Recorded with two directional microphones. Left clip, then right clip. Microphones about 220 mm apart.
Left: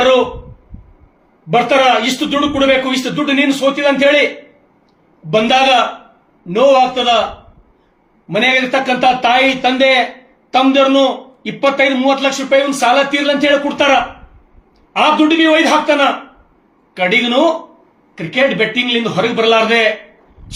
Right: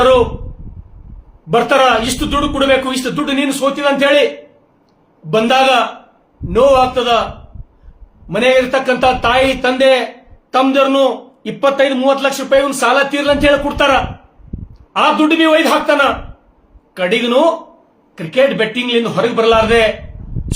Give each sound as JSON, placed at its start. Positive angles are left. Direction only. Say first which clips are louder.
{"t": 1.5, "sound": "a man's voice", "louder": "even", "side_deg": -20}
{"t": 5.3, "sound": "a man's voice", "louder": "even", "side_deg": -20}
{"t": 8.3, "sound": "a man's voice", "louder": "right 1 dB", "side_deg": -15}